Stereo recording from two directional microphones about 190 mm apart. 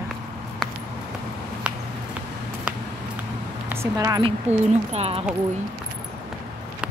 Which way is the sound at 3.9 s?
20° right (ahead or behind).